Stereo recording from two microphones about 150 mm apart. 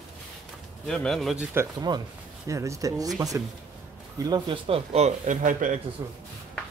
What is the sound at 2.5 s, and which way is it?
A man's voice, 20° right (ahead or behind).